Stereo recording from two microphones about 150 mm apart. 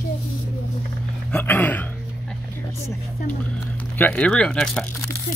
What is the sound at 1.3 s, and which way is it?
Speech, 10° left (ahead or behind).